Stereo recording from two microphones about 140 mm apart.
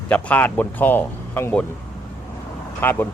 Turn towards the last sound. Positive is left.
turn(degrees=15)  # may be behind; listen again after turning